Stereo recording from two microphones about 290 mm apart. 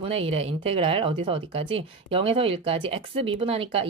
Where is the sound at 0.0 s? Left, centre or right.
Centre.